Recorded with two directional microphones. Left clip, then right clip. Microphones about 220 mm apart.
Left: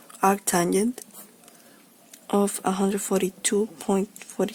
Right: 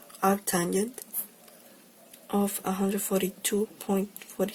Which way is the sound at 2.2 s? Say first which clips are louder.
Left 6 dB; 30° left (ahead or behind).